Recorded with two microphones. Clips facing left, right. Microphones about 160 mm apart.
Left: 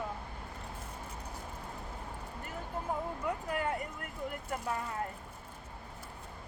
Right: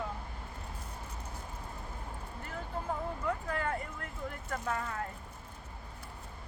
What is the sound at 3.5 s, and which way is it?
Speech, 15° left (ahead or behind).